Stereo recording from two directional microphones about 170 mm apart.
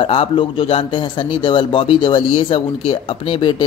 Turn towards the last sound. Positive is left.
turn(degrees=30)  # may be behind; listen again after turning